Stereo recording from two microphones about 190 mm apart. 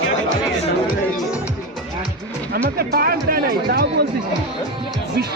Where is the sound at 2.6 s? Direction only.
55° right (ahead or behind).